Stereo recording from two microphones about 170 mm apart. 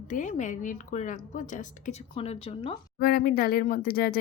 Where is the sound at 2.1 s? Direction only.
35° left (ahead or behind).